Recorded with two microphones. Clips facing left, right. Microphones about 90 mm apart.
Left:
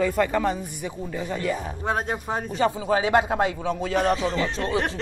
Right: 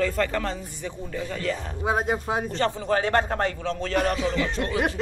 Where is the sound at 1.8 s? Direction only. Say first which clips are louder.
Right 2 dB; 5° right (ahead or behind).